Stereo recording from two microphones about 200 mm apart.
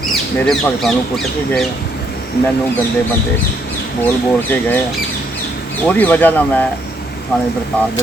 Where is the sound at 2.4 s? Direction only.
55° left (ahead or behind).